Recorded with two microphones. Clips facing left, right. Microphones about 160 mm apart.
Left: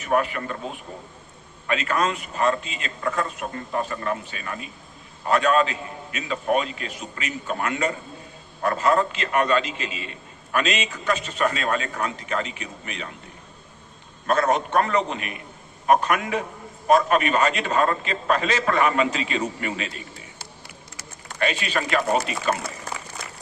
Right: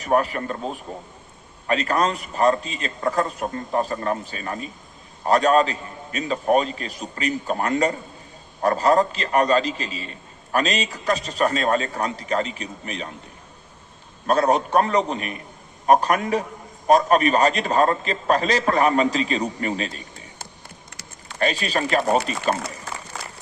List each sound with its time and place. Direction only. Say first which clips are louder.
0.0 s a man's voice: right 2 dB; 35° right (ahead or behind)
14.3 s a man's voice: right 2 dB; 35° right (ahead or behind)
21.3 s a man's voice: right 2 dB; 35° right (ahead or behind)
23.1 s a sound: right 2 dB; 90° right